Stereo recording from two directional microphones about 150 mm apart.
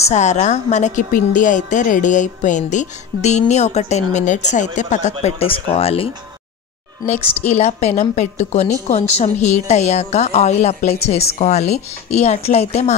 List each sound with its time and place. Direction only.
0.1 s a woman's voice: 50° left (ahead or behind)
5.2 s speech: 40° left (ahead or behind)
7.1 s a woman's voice: 40° left (ahead or behind)